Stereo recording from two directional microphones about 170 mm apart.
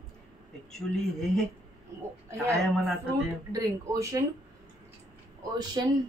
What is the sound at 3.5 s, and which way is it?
Speech, 20° right (ahead or behind).